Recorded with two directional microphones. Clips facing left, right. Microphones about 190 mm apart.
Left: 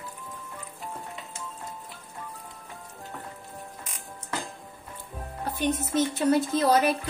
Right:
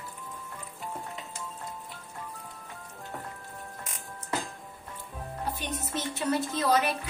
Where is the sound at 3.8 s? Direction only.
Centre (ahead or behind).